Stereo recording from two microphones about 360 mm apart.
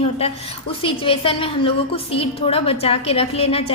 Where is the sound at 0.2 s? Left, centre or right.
Centre.